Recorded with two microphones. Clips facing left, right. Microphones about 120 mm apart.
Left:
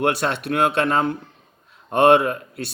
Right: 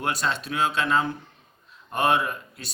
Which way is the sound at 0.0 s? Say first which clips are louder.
Left 6 dB; 65° left (ahead or behind).